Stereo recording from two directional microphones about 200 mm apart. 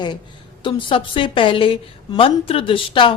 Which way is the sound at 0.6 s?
25° left (ahead or behind).